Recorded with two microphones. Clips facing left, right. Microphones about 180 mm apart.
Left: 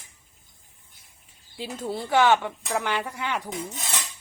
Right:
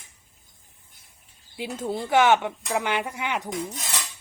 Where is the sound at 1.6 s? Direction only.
15° right (ahead or behind).